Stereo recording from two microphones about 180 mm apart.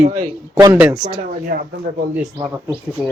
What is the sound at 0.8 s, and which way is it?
Speech, 5° right (ahead or behind).